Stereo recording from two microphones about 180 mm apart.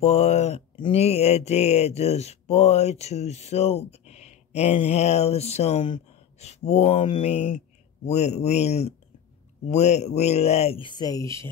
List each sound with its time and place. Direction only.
0.0 s speech: 40° left (ahead or behind); by 11.4 s 15° left (ahead or behind)